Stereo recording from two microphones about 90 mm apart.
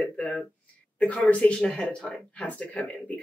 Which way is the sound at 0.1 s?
15° left (ahead or behind).